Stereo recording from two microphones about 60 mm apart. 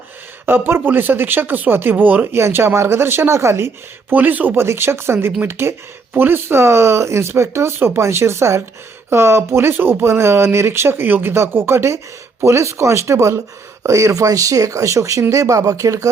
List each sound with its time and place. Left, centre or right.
0.4 s speech: right
4.1 s speech: right
4.5 s speech: right